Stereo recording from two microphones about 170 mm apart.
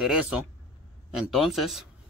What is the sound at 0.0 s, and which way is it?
Speech, 5° right (ahead or behind).